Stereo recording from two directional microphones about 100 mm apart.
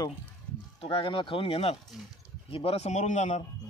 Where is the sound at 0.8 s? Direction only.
60° left (ahead or behind); by 2.9 s 75° left (ahead or behind).